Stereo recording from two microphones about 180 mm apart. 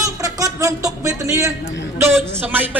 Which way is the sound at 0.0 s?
15° right (ahead or behind).